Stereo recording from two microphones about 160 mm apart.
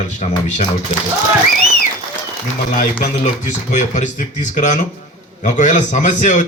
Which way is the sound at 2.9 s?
50° left (ahead or behind).